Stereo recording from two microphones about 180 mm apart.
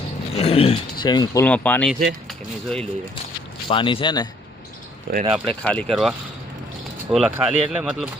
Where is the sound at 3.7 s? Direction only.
30° left (ahead or behind).